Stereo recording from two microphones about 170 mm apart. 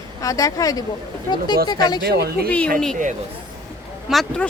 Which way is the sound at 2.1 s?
70° right (ahead or behind).